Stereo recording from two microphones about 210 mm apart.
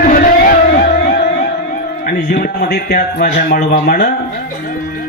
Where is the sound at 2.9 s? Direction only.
45° left (ahead or behind).